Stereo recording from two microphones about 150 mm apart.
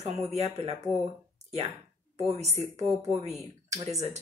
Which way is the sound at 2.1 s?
45° right (ahead or behind).